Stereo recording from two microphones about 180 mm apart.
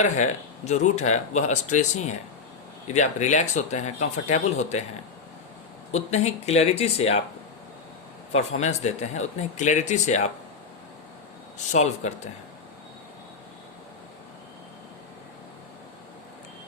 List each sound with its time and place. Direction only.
0.0 s speech: 40° left (ahead or behind)
5.9 s speech: 40° left (ahead or behind)
8.3 s speech: 40° left (ahead or behind)
11.5 s speech: 40° left (ahead or behind)